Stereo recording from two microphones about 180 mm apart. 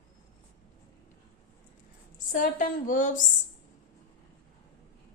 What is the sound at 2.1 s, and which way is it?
A woman's voice, 50° left (ahead or behind).